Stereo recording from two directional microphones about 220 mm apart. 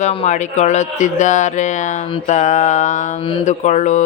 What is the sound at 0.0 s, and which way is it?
Mantra, 30° left (ahead or behind).